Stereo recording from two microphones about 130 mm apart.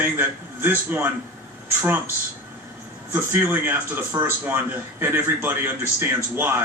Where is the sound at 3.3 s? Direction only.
15° right (ahead or behind).